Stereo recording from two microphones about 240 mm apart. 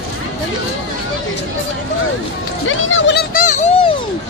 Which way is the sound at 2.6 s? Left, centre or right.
Left.